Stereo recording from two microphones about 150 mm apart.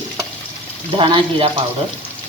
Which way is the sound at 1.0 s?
35° right (ahead or behind).